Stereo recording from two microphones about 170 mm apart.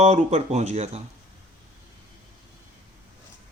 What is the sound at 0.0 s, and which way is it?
Speech, 40° right (ahead or behind).